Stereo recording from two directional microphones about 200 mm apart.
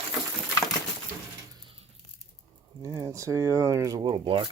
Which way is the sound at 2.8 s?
15° right (ahead or behind).